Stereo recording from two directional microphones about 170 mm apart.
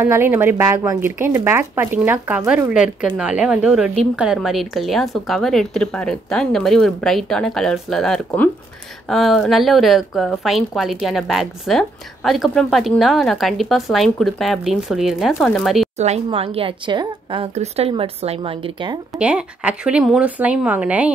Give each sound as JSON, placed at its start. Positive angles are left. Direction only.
{"t": 0.0, "sound": "a woman's voice", "side_deg": -15}
{"t": 16.0, "sound": "a woman's voice", "side_deg": -40}
{"t": 19.1, "sound": "speech", "side_deg": -5}